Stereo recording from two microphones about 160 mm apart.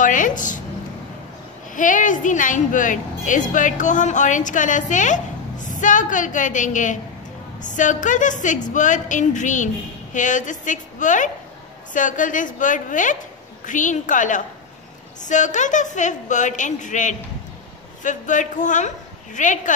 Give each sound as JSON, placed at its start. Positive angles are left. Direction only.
{"t": 0.0, "sound": "a woman's voice", "side_deg": 55}
{"t": 1.8, "sound": "a woman's voice", "side_deg": 55}